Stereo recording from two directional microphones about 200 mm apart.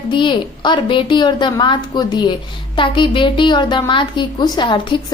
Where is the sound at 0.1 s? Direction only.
25° left (ahead or behind).